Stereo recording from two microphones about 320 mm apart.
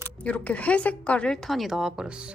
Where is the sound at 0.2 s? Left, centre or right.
Centre.